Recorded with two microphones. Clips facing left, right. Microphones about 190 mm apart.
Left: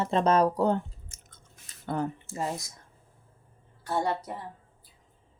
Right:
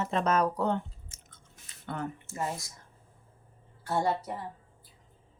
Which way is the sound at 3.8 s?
Centre (ahead or behind).